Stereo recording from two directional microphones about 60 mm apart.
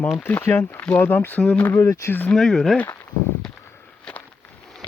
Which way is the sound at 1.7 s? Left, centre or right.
Left.